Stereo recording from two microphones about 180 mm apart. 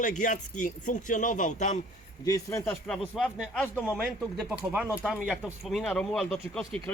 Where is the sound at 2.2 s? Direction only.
15° left (ahead or behind).